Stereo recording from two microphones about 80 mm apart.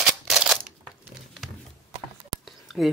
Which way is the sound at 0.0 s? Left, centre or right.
Centre.